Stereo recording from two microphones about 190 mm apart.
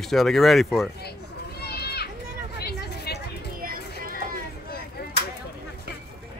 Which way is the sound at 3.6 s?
50° right (ahead or behind).